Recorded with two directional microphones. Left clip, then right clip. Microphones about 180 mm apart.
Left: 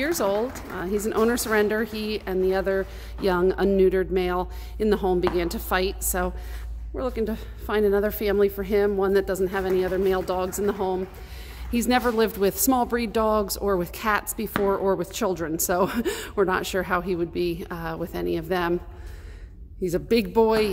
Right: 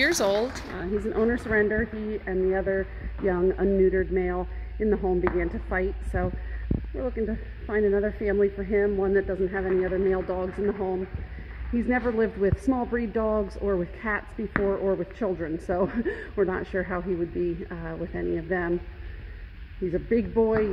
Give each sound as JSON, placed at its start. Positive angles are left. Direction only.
{"t": 0.0, "sound": "speech", "side_deg": 10}
{"t": 1.5, "sound": "a woman's voice", "side_deg": 30}
{"t": 19.9, "sound": "speech", "side_deg": 35}